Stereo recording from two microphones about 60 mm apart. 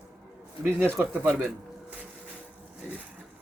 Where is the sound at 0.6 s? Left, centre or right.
Right.